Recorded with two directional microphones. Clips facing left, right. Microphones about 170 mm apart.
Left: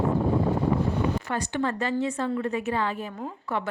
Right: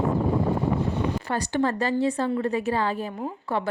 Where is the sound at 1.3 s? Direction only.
35° right (ahead or behind).